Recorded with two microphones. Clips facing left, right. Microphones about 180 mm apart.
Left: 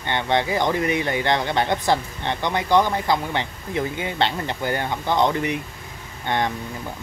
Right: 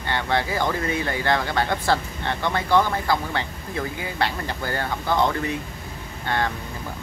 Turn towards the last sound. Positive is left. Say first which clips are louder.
# left 2 dB
turn(degrees=20)  # may be behind; listen again after turning